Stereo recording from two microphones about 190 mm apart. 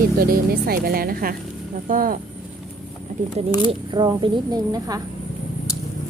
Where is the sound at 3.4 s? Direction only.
25° right (ahead or behind).